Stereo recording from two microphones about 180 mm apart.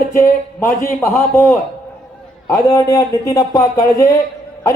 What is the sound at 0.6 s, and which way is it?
A man's voice, 15° left (ahead or behind).